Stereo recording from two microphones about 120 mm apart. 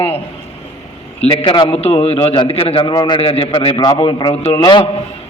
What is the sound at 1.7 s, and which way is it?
A man's voice, 55° left (ahead or behind).